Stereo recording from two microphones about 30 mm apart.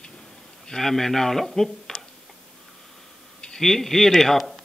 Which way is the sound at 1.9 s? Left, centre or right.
Centre.